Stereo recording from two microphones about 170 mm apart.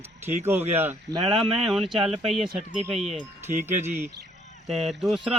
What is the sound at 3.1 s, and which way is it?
Speech, 40° right (ahead or behind).